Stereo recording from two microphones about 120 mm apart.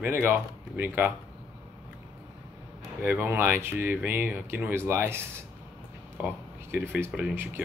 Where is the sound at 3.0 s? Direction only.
15° right (ahead or behind).